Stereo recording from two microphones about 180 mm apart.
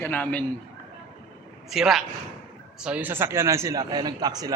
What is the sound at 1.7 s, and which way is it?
A man's voice, centre (ahead or behind).